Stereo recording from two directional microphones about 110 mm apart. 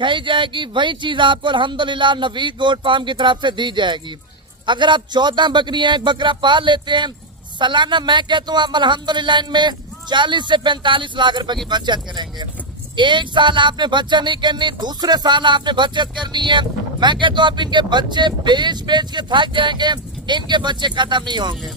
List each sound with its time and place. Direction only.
0.0 s speech: 45° right (ahead or behind)